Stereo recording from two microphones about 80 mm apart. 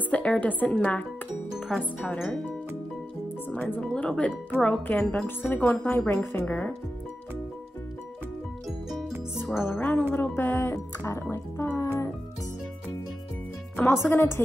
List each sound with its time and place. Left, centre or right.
0.1 s speech: centre
3.8 s speech: centre
5.5 s speech: left
9.6 s speech: left
13.7 s speech: left